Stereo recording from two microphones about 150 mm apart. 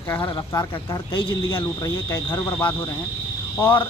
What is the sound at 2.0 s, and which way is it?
Speech, 15° left (ahead or behind).